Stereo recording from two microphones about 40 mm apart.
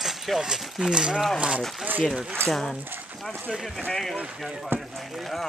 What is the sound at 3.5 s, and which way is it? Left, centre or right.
Speech, centre.